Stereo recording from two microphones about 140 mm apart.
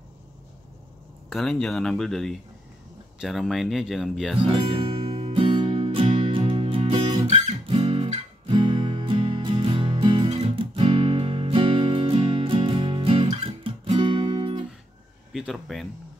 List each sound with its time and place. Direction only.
1.3 s speech: 5° left (ahead or behind)
4.4 s music: 40° right (ahead or behind)
15.3 s a sound: centre (ahead or behind)